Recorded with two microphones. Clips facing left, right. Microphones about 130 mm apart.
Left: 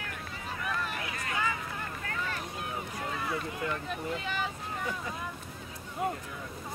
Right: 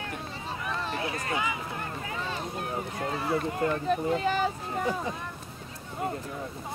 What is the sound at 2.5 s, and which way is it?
Speech, 45° right (ahead or behind).